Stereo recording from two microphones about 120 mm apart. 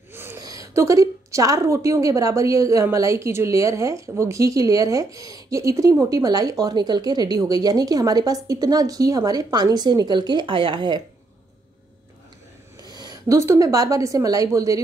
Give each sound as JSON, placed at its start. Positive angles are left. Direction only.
{"t": 0.1, "sound": "a sound", "side_deg": -20}
{"t": 0.4, "sound": "a woman's voice", "side_deg": -30}
{"t": 12.8, "sound": "a woman's voice", "side_deg": -35}